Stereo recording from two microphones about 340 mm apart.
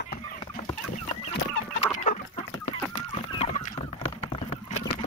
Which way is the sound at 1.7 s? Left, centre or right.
Centre.